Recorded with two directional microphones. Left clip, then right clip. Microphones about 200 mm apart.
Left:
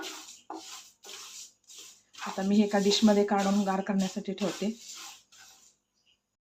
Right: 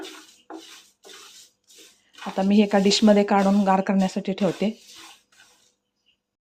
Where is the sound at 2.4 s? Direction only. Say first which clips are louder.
Right 7 dB; 45° right (ahead or behind).